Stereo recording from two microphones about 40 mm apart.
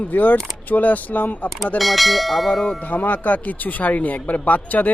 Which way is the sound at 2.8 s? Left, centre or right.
Left.